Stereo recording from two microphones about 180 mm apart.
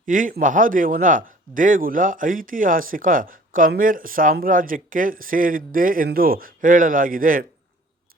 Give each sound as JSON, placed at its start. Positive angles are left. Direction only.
{"t": 0.0, "sound": "speech", "side_deg": -50}